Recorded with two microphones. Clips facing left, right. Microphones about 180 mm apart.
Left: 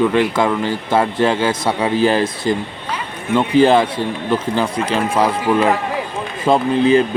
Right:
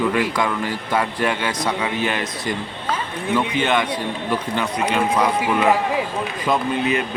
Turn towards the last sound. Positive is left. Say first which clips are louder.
# left 8 dB
turn(degrees=30)  # may be behind; listen again after turning